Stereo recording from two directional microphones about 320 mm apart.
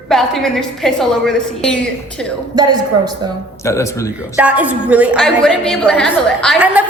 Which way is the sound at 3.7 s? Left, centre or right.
Centre.